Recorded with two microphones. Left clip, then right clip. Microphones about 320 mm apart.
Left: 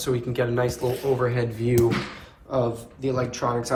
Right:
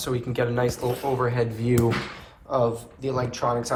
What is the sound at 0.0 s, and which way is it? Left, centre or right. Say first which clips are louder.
Speech: left 1 dB; centre.